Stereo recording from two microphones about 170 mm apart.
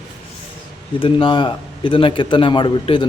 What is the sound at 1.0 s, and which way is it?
A man's voice, 30° left (ahead or behind).